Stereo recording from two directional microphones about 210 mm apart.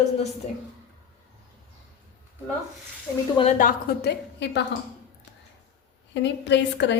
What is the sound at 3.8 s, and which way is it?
Speech, 50° left (ahead or behind).